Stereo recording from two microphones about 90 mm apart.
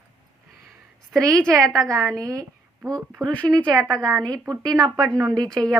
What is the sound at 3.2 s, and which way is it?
Speech, 15° left (ahead or behind).